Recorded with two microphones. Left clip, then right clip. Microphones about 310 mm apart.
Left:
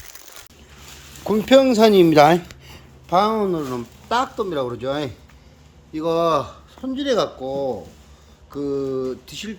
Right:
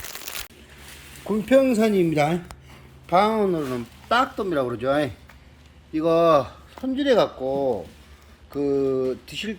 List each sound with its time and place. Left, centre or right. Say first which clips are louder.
1.3 s speech: left 4 dB; centre
2.0 s speech: left 9 dB; left
3.1 s speech: left 1 dB; centre